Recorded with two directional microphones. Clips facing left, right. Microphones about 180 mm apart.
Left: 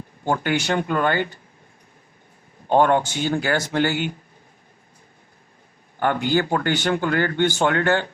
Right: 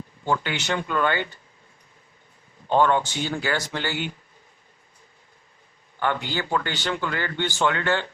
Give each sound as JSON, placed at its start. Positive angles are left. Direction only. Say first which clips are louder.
{"t": 0.3, "sound": "a man's voice", "louder": "left 4 dB", "side_deg": 50}
{"t": 2.6, "sound": "a man's voice", "louder": "left 3 dB", "side_deg": 50}
{"t": 6.0, "sound": "a man's voice", "louder": "left 6 dB", "side_deg": 45}